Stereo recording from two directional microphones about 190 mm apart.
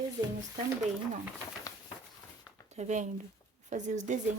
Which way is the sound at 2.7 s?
40° right (ahead or behind).